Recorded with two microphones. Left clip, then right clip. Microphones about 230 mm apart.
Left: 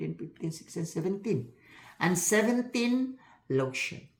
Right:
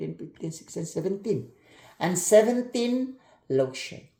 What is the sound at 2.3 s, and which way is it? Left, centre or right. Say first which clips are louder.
Speech: right 11 dB; centre.